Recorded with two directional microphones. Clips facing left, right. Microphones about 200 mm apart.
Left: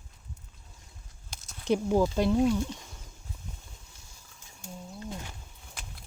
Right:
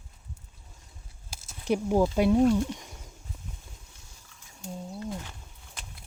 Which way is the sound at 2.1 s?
10° right (ahead or behind).